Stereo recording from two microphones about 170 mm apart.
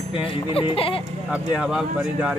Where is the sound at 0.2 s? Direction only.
35° left (ahead or behind).